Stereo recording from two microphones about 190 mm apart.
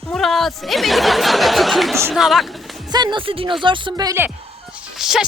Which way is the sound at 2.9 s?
20° right (ahead or behind).